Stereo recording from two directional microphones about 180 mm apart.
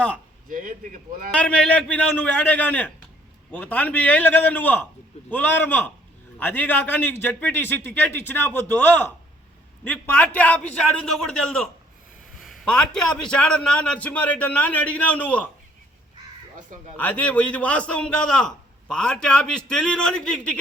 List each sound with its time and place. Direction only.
0.4 s speech: 50° right (ahead or behind)
1.3 s a man's voice: 5° left (ahead or behind)
16.6 s speech: 45° right (ahead or behind)
17.0 s a man's voice: 10° left (ahead or behind)